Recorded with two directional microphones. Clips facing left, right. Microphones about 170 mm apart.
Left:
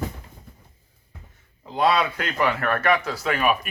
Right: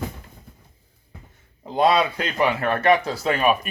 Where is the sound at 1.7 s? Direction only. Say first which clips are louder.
Right 2 dB; 20° right (ahead or behind).